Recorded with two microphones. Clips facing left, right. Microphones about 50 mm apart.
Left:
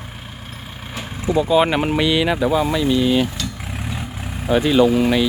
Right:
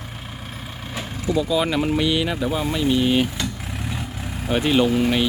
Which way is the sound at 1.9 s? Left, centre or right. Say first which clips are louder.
Left 4 dB; left.